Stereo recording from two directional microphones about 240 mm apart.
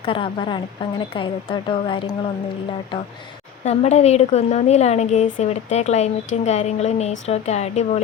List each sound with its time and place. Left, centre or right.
0.0 s a woman's voice: left
3.6 s a woman's voice: left